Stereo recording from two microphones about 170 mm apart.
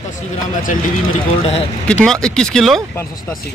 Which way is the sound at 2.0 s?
5° left (ahead or behind).